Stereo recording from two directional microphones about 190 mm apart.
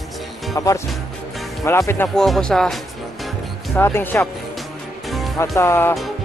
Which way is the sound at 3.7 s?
10° left (ahead or behind).